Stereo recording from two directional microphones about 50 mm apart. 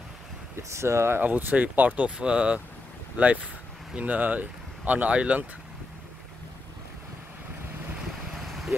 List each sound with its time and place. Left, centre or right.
0.6 s speech: right
1.2 s speech: right
2.0 s speech: centre
8.5 s vehicle: centre